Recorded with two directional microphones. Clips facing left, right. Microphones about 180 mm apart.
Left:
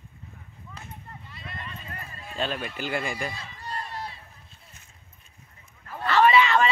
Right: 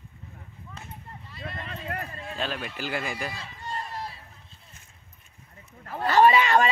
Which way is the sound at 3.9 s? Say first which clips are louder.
Even; 5° right (ahead or behind).